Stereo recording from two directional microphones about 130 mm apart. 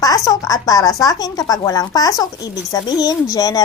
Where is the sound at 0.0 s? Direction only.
30° left (ahead or behind).